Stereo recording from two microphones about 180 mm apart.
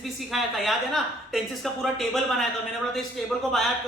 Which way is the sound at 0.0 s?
Centre (ahead or behind).